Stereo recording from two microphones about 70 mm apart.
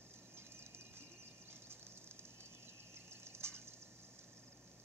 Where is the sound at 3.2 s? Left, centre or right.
Right.